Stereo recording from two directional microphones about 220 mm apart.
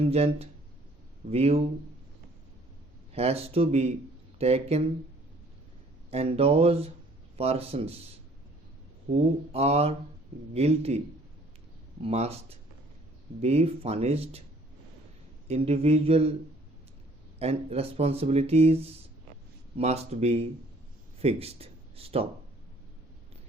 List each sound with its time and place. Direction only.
0.0 s speech: 25° right (ahead or behind)
3.1 s speech: 30° right (ahead or behind)
6.1 s speech: 25° right (ahead or behind)
9.1 s speech: 30° right (ahead or behind)
12.0 s speech: 30° right (ahead or behind)
15.4 s speech: 25° right (ahead or behind)
17.4 s speech: 25° right (ahead or behind)